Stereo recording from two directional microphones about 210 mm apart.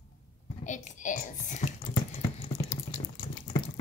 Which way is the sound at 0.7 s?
35° left (ahead or behind).